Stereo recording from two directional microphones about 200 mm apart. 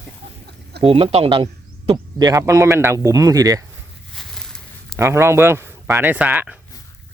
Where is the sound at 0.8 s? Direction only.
30° right (ahead or behind).